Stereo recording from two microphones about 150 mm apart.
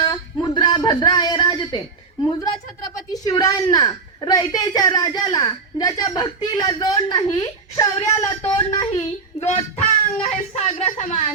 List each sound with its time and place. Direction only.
0.0 s a sound: 30° left (ahead or behind)
2.4 s speech: 25° left (ahead or behind)
9.5 s speech: 45° left (ahead or behind)